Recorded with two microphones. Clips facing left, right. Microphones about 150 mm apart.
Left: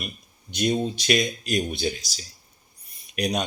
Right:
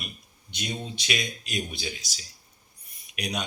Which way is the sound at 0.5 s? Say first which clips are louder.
Left 11 dB; 45° left (ahead or behind).